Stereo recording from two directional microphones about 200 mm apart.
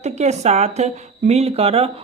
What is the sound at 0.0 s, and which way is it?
Speech, 35° right (ahead or behind).